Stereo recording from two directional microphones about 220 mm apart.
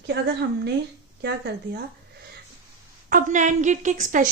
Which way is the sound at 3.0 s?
35° right (ahead or behind).